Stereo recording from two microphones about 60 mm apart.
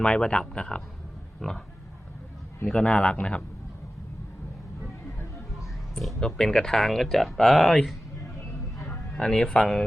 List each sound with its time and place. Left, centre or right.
0.0 s speech: centre
2.8 s a man's voice: left
6.1 s speech: centre
9.1 s speech: centre